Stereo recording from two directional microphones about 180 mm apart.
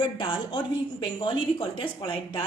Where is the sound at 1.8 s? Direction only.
25° left (ahead or behind).